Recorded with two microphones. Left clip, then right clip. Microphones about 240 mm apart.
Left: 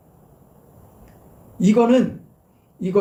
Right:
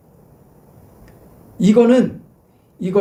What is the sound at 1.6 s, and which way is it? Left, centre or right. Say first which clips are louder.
Speech: right 4 dB; centre.